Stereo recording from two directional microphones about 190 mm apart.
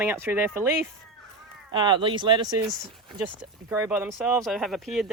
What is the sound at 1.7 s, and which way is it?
Speech, 25° right (ahead or behind).